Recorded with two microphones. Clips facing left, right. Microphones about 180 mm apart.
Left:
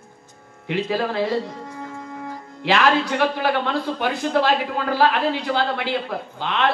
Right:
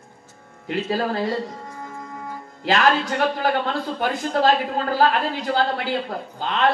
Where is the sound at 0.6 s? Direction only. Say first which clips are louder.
Left 1 dB; 45° right (ahead or behind).